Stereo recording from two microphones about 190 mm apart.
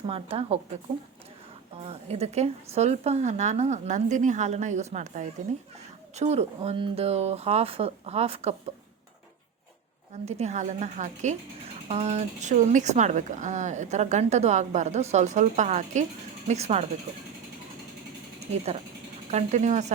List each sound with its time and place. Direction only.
0.1 s speech: 30° right (ahead or behind)
1.7 s speech: 30° right (ahead or behind)
10.2 s speech: 35° right (ahead or behind)
18.5 s speech: 35° right (ahead or behind)